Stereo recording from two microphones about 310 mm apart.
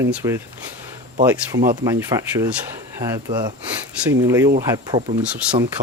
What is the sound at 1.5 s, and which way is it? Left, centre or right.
Speech, right.